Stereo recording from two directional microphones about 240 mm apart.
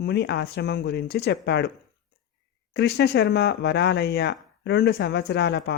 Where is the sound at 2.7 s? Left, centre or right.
Left.